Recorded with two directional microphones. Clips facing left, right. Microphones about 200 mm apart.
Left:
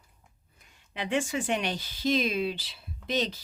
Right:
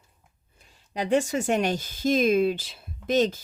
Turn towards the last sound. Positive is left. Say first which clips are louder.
# right 7 dB
turn(degrees=-50)  # may be behind; listen again after turning